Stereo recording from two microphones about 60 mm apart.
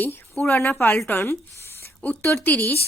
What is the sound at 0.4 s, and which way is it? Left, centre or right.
Speech, left.